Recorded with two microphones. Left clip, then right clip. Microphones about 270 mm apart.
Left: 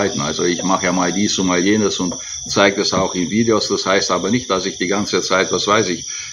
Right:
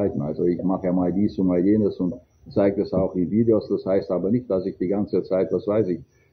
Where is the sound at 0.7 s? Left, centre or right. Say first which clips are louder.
Left 7 dB; left.